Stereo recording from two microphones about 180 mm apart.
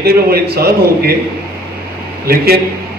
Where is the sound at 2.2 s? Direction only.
60° right (ahead or behind).